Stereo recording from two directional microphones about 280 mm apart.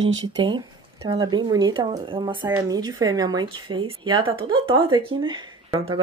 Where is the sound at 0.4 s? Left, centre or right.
Centre.